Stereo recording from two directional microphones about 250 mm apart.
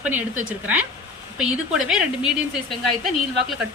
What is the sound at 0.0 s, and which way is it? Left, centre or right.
Speech, centre.